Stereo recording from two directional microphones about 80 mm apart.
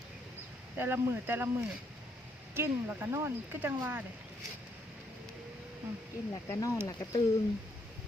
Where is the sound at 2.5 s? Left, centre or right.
Right.